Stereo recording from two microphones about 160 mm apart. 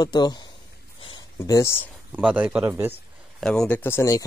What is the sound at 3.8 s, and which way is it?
Speech, 15° left (ahead or behind).